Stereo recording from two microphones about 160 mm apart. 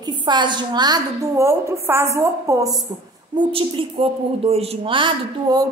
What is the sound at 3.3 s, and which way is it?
A woman's voice, 30° right (ahead or behind).